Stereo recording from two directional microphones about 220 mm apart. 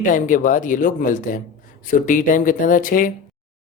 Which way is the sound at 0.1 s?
35° left (ahead or behind).